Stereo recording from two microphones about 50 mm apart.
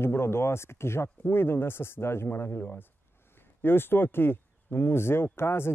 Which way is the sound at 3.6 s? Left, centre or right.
Left.